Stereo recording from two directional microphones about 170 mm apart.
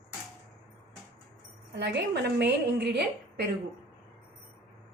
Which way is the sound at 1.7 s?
90° right.